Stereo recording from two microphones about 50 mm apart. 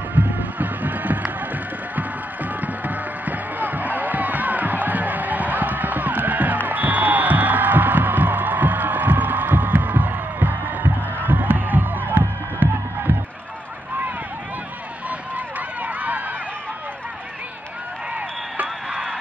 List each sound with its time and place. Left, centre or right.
0.1 s music: right
15.0 s run: right